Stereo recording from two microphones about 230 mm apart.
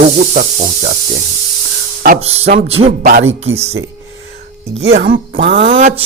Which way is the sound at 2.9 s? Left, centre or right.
Right.